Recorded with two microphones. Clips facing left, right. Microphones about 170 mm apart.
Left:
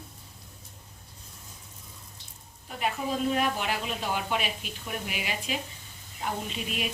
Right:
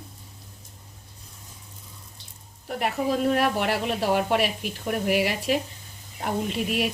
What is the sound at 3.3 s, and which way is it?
Speech, 65° right (ahead or behind).